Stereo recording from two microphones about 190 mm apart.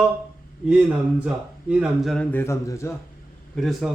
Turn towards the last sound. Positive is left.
turn(degrees=0)  # may be behind; listen again after turning